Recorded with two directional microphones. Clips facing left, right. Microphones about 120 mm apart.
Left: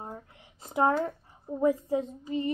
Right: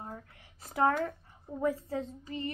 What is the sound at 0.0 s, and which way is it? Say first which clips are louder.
A woman's voice: left 2 dB; 20° left (ahead or behind).